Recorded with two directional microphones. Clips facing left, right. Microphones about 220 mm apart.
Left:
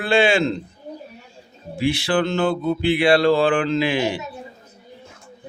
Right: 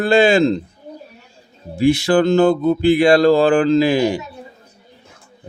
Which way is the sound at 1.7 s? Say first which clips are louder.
Right 6 dB; 45° right (ahead or behind).